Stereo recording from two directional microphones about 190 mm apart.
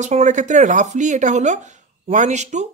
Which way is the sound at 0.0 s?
40° right (ahead or behind).